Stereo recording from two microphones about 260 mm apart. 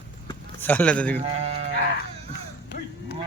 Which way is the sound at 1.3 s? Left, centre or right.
Right.